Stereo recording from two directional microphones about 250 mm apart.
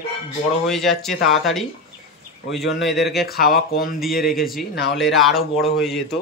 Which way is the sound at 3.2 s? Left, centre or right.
Left.